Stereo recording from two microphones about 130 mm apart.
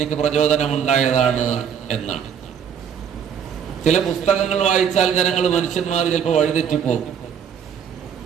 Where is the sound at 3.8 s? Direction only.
60° left (ahead or behind).